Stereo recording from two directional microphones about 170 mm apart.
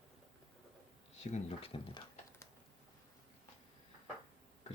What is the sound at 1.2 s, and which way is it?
Speech, 40° left (ahead or behind).